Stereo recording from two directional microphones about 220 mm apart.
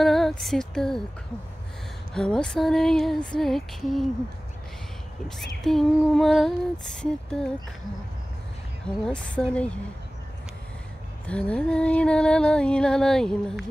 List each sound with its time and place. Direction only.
0.0 s speech: centre (ahead or behind)
2.1 s music: 5° left (ahead or behind)
5.4 s music: centre (ahead or behind)
8.8 s music: 5° left (ahead or behind)
11.2 s music: 5° left (ahead or behind)